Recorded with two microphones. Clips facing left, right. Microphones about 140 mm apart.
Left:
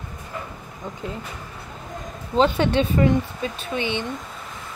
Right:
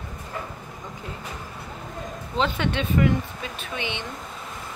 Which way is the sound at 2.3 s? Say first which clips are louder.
Left 6 dB; 35° left (ahead or behind).